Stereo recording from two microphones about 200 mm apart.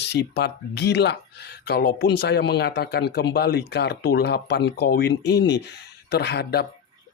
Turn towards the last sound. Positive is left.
turn(degrees=55)  # may be behind; listen again after turning